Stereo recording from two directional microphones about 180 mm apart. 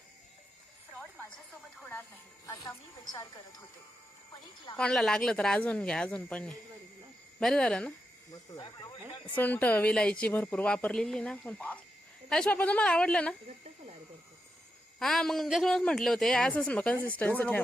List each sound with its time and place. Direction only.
2.5 s speech: 20° left (ahead or behind)
4.8 s a man's voice: 5° left (ahead or behind)
9.3 s a man's voice: 10° left (ahead or behind)
14.9 s a man's voice: centre (ahead or behind)